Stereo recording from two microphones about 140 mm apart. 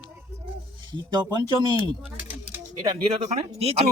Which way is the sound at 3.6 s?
45° right (ahead or behind).